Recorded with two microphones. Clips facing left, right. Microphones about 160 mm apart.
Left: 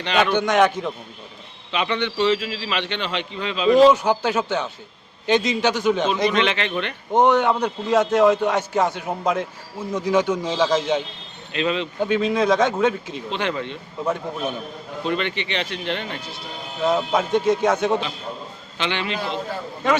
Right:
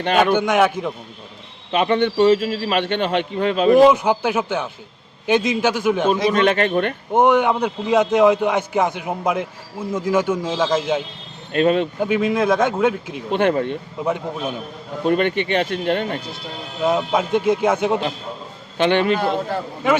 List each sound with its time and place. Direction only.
0.3 s a man's voice: 10° right (ahead or behind)
1.7 s a man's voice: 45° right (ahead or behind)
3.8 s a man's voice: 15° right (ahead or behind)
6.3 s a man's voice: 45° right (ahead or behind)
7.1 s a man's voice: 10° right (ahead or behind)
11.5 s a man's voice: 50° right (ahead or behind)
11.9 s a man's voice: 5° right (ahead or behind)
13.3 s a man's voice: 50° right (ahead or behind)
14.0 s a man's voice: 10° right (ahead or behind)
15.0 s a man's voice: 50° right (ahead or behind)
16.8 s a man's voice: 5° right (ahead or behind)
18.8 s a man's voice: 50° right (ahead or behind)